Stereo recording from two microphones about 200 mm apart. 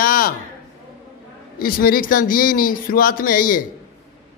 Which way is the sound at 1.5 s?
45° left (ahead or behind).